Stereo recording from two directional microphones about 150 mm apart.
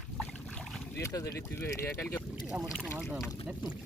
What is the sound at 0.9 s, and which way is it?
Speech, 20° left (ahead or behind).